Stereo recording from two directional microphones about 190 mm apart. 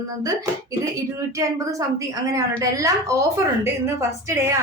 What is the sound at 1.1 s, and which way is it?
A woman's voice, 15° right (ahead or behind).